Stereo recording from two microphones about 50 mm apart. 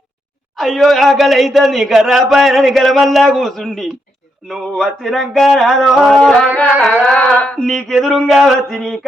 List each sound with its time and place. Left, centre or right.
0.5 s speech: centre
4.5 s speech: centre
5.7 s music: centre
6.1 s a sound: centre
7.3 s a sound: centre
7.6 s speech: centre